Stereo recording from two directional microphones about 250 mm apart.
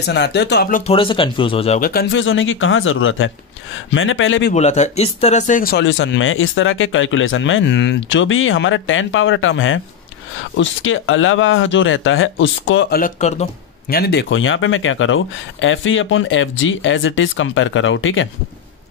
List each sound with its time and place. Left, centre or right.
0.0 s speech: left
1.8 s speech: left
2.2 s speech: left
4.6 s speech: left
13.0 s speech: left